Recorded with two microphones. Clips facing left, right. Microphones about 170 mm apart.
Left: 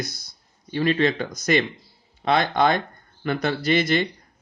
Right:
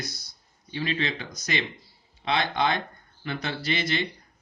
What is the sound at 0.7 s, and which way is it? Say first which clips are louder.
Speech: left 9 dB; 55° left (ahead or behind).